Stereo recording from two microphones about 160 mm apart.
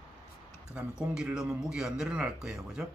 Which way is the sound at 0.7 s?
5° right (ahead or behind).